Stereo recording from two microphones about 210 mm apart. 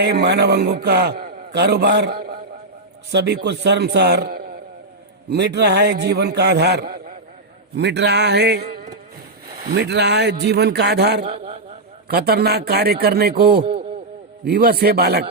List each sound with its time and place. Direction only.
0.0 s a man's voice: 50° right (ahead or behind)
7.8 s a man's voice: 55° right (ahead or behind)
9.7 s a man's voice: 55° right (ahead or behind)
11.3 s a man's voice: 30° right (ahead or behind)
12.0 s a man's voice: 50° right (ahead or behind)